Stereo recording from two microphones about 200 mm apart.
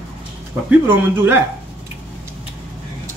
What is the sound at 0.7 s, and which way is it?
Speech, 10° right (ahead or behind).